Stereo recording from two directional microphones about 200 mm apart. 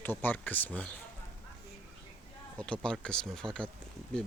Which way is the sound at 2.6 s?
5° left (ahead or behind).